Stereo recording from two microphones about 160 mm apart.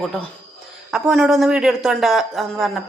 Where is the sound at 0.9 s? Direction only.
Centre (ahead or behind).